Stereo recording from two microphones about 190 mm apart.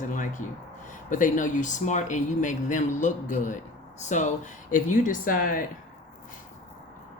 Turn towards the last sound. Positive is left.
turn(degrees=45)  # may be behind; listen again after turning